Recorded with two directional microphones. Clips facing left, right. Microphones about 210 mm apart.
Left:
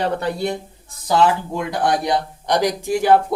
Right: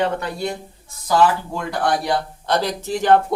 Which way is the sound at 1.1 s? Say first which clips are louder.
Even; 20° left (ahead or behind).